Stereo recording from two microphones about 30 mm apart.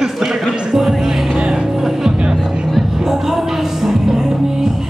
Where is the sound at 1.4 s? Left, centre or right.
Right.